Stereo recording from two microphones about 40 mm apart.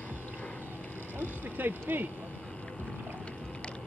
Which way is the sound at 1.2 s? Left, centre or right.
Right.